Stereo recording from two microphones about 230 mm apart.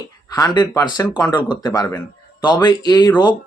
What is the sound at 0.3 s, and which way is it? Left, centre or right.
Speech, centre.